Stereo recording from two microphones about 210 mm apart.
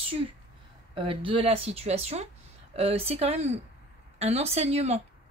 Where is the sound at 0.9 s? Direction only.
25° right (ahead or behind).